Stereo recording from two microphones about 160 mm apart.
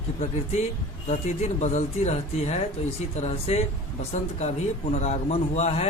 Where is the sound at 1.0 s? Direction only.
45° left (ahead or behind).